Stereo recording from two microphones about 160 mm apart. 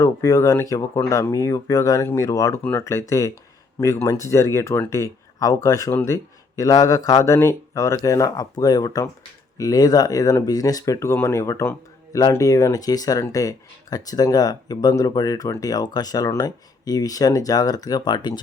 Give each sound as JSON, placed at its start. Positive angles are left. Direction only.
{"t": 0.0, "sound": "speech", "side_deg": 20}